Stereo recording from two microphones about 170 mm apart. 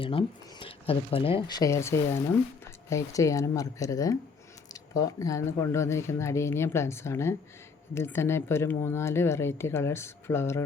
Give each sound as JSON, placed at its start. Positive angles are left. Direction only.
{"t": 0.0, "sound": "speech", "side_deg": 30}